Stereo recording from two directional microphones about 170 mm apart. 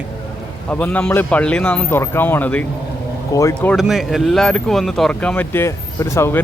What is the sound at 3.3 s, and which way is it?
Speech, 20° left (ahead or behind).